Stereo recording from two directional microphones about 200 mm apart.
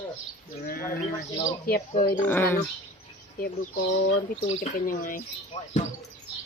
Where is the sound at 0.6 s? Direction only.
45° left (ahead or behind).